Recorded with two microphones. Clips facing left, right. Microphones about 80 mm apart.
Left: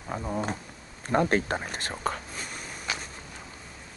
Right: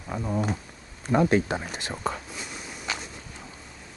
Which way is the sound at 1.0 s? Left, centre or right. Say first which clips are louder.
Right 3 dB; left.